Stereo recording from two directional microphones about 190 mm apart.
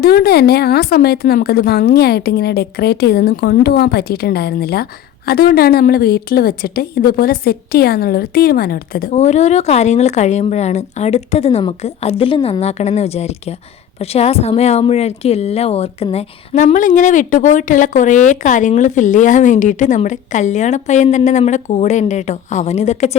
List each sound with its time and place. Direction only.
0.0 s a woman's voice: 55° left (ahead or behind)
9.1 s speech: 35° left (ahead or behind)